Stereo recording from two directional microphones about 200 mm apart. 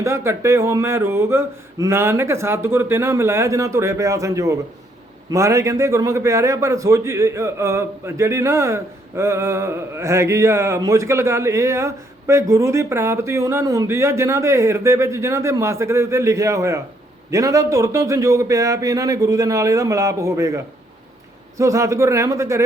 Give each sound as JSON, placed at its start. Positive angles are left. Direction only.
{"t": 0.0, "sound": "a man's voice", "side_deg": -15}